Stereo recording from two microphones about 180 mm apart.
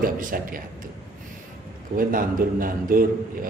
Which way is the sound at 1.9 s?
50° right (ahead or behind).